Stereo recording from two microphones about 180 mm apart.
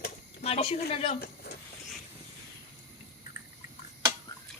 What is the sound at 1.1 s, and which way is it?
Vehicle, 60° left (ahead or behind).